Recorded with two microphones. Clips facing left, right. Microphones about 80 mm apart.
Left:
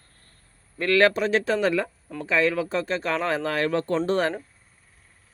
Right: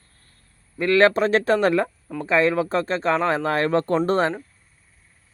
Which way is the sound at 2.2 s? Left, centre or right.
Right.